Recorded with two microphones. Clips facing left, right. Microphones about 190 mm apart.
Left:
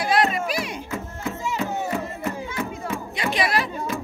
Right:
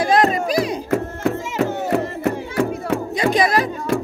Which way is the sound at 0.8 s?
70° right (ahead or behind).